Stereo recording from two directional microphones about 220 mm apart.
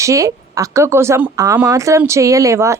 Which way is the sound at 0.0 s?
15° right (ahead or behind).